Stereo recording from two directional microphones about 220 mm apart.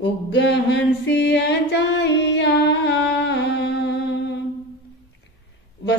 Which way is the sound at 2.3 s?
50° left (ahead or behind).